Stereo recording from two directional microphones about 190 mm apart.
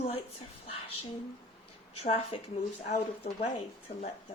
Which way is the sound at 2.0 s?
30° left (ahead or behind).